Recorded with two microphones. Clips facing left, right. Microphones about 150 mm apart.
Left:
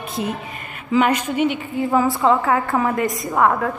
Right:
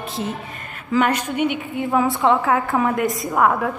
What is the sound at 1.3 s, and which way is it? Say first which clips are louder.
Speech: left 1 dB; 55° right (ahead or behind).